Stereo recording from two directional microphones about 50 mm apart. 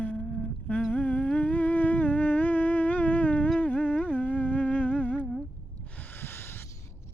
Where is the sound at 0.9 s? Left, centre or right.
Left.